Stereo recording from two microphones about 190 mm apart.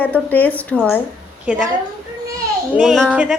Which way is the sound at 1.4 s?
5° right (ahead or behind).